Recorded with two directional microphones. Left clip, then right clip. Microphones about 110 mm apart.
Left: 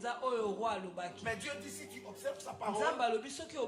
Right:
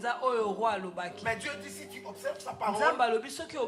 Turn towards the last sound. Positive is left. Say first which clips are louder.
# right 6 dB
turn(degrees=-30)  # may be behind; listen again after turning